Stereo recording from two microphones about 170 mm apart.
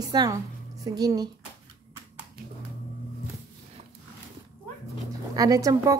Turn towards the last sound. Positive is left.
turn(degrees=-20)  # may be behind; listen again after turning